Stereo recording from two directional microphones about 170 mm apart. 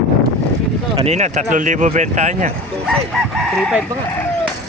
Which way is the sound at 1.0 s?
40° right (ahead or behind).